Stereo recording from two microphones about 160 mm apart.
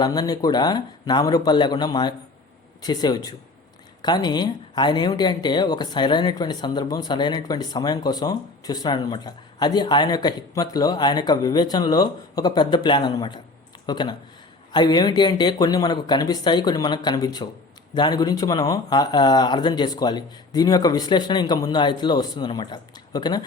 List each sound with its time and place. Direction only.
0.0 s speech: 25° left (ahead or behind)